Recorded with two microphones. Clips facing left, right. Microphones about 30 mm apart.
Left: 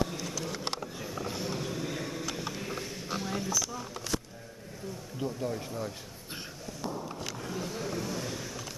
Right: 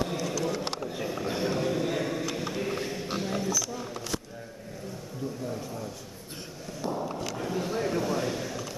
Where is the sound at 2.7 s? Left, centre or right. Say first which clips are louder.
Right 4 dB; right.